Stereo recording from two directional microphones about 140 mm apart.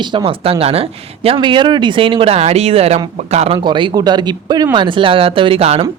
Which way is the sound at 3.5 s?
35° right (ahead or behind).